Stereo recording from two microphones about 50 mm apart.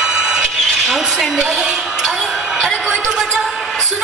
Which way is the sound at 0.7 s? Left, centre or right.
Centre.